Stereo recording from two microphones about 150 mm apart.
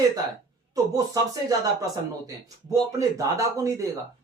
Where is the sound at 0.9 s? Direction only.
25° right (ahead or behind).